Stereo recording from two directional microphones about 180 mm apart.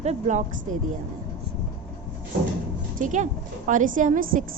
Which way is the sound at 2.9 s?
45° right (ahead or behind).